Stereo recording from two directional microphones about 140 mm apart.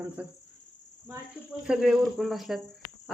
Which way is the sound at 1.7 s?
5° right (ahead or behind).